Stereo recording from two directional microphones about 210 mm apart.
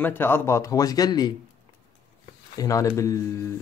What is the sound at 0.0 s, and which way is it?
A man's voice, 10° left (ahead or behind).